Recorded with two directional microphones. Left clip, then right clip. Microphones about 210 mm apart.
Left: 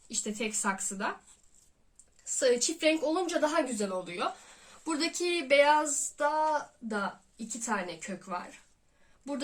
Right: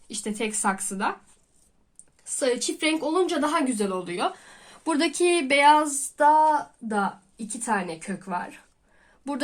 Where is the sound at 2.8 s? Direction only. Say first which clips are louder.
Right 5 dB; 35° right (ahead or behind).